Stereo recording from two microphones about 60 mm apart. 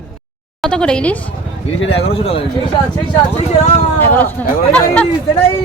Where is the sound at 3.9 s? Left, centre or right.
Left.